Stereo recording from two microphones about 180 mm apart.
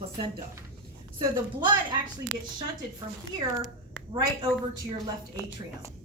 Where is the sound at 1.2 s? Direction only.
25° right (ahead or behind).